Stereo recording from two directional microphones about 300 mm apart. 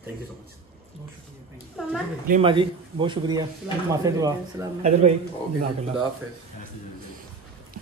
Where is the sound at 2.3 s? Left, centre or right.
Centre.